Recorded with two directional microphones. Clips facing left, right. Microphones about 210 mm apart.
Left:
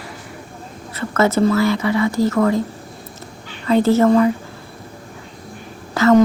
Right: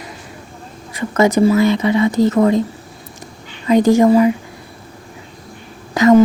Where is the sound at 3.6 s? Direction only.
15° right (ahead or behind).